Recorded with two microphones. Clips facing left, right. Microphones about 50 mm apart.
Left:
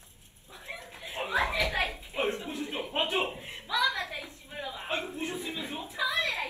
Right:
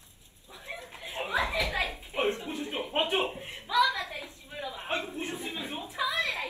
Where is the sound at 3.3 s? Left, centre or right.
Right.